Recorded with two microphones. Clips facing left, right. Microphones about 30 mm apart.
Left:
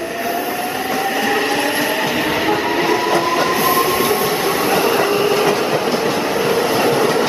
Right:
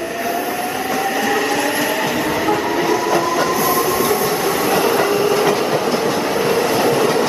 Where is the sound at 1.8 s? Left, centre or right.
Centre.